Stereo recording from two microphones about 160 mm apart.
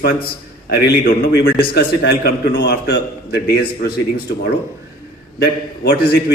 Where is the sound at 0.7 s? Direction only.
75° left (ahead or behind).